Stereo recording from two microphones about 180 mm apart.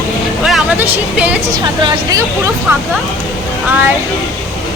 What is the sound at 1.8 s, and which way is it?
Speech, 20° right (ahead or behind).